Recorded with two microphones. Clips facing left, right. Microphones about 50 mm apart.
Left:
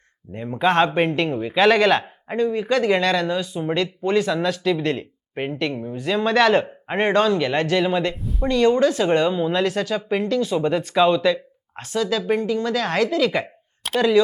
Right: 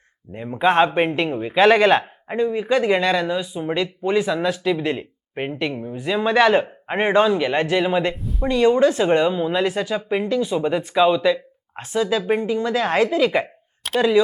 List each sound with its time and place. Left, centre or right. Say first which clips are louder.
0.3 s speech: right 1 dB; centre
8.1 s speech: even; centre
8.4 s a woman's voice: right 1 dB; centre
13.8 s a sound: right 1 dB; centre